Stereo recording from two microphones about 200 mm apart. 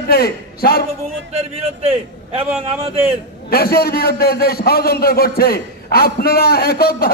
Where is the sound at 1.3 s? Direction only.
30° right (ahead or behind).